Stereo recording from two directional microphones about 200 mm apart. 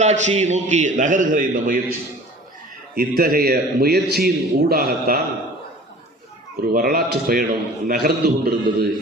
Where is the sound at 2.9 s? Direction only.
45° right (ahead or behind).